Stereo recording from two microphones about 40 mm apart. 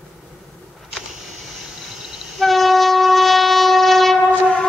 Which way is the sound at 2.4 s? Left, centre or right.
Centre.